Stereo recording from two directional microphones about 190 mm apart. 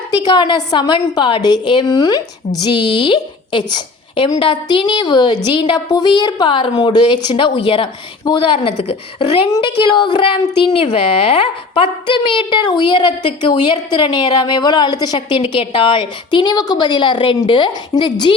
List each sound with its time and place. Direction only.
0.3 s a woman's voice: 25° left (ahead or behind)